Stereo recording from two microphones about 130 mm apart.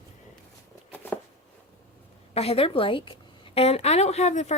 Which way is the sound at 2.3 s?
50° left (ahead or behind).